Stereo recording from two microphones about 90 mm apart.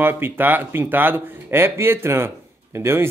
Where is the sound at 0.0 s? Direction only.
25° right (ahead or behind).